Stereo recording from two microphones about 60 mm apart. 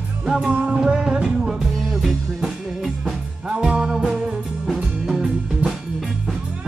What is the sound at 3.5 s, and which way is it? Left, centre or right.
Music, centre.